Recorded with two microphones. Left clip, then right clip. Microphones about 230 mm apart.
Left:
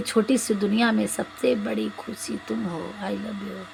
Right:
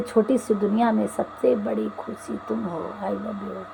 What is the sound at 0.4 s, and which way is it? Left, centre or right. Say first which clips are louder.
A woman's voice: right 2 dB; left.